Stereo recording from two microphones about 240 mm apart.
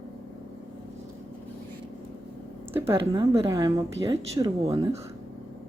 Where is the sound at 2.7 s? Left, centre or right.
Centre.